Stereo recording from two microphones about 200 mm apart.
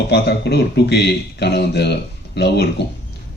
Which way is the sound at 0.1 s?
55° left (ahead or behind).